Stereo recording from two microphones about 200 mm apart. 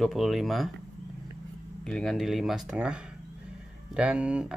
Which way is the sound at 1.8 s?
5° left (ahead or behind).